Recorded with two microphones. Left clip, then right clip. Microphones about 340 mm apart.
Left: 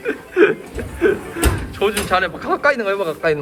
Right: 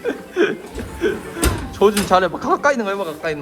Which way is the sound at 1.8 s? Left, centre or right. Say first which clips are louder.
Right 3 dB; centre.